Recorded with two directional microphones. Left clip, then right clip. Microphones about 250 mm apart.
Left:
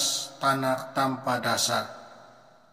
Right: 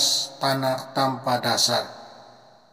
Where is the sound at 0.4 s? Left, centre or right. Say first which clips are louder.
Right 2 dB; centre.